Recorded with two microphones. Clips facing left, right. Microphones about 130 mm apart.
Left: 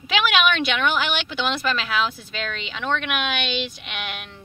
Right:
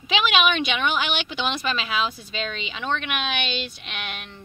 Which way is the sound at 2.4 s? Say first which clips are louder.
Left 1 dB; 5° right (ahead or behind).